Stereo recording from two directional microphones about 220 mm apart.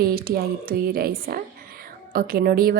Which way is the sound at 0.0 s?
40° right (ahead or behind).